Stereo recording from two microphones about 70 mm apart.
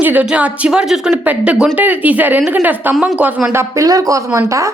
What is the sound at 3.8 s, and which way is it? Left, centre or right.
Speech, right.